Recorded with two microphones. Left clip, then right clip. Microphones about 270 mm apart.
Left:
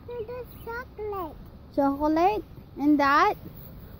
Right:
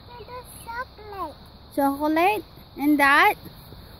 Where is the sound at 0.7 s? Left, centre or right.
Centre.